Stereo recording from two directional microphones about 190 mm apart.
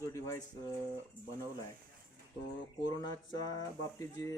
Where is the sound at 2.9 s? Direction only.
20° left (ahead or behind).